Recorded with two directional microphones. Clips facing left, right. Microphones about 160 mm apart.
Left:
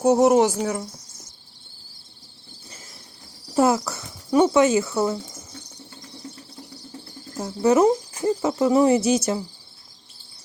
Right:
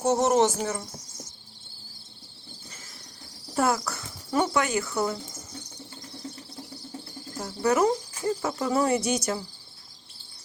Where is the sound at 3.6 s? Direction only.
25° left (ahead or behind).